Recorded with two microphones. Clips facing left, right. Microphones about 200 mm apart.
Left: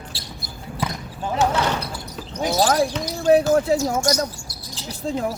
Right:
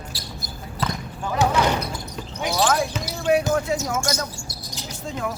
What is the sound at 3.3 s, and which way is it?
Speech, 35° left (ahead or behind).